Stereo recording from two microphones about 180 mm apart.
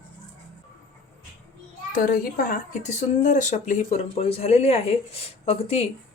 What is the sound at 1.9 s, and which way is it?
Speech, 55° left (ahead or behind).